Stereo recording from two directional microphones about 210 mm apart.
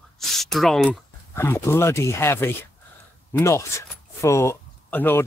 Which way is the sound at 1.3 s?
10° left (ahead or behind).